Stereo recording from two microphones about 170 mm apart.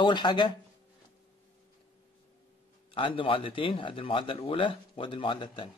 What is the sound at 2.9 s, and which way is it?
Speech, 30° left (ahead or behind).